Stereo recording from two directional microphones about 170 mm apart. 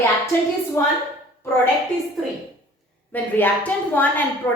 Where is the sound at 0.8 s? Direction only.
15° left (ahead or behind).